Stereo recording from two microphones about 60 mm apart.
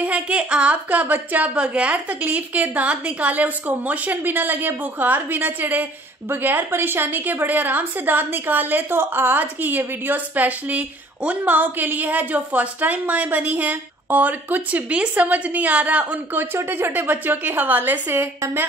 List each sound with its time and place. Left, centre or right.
0.0 s a woman's voice: centre
16.5 s a woman's voice: right